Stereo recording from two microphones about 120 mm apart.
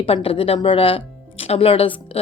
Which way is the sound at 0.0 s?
50° left (ahead or behind).